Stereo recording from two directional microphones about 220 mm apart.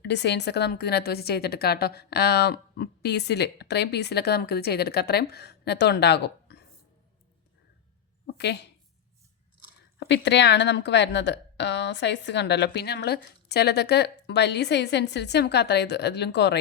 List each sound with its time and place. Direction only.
0.0 s a woman's voice: 50° left (ahead or behind)
8.4 s a woman's voice: 50° left (ahead or behind)
10.0 s a woman's voice: 50° left (ahead or behind)